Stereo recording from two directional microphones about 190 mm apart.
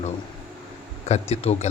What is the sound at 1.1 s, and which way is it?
Speech, 35° left (ahead or behind).